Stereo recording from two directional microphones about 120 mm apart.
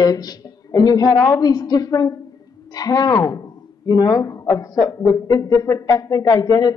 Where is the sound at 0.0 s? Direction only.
30° left (ahead or behind).